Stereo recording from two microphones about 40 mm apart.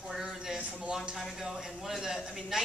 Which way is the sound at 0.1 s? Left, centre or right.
Centre.